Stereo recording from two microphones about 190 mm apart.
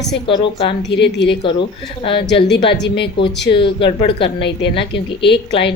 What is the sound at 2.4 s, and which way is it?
A woman's voice, 65° left (ahead or behind).